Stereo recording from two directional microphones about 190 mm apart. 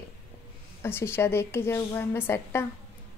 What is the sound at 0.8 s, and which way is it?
A woman's voice, 10° left (ahead or behind).